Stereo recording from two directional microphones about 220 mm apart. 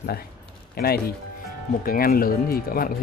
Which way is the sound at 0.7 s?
45° left (ahead or behind).